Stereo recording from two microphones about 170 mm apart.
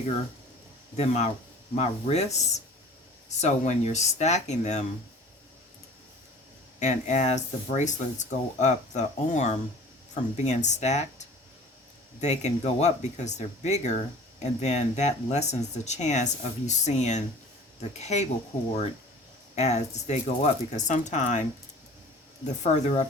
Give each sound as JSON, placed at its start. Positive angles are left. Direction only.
{"t": 0.9, "sound": "speech", "side_deg": 40}
{"t": 6.7, "sound": "speech", "side_deg": 45}
{"t": 19.5, "sound": "speech", "side_deg": 40}
{"t": 22.6, "sound": "speech", "side_deg": 40}